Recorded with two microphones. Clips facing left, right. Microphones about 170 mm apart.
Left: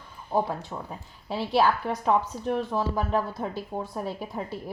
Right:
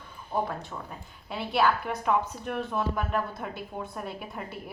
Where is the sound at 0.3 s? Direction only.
25° left (ahead or behind).